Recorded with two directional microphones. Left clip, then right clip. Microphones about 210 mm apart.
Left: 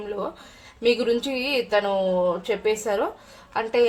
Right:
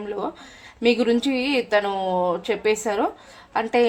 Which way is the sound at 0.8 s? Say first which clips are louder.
Right 1 dB; 35° right (ahead or behind).